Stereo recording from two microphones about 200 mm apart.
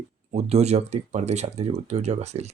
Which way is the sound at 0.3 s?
30° right (ahead or behind).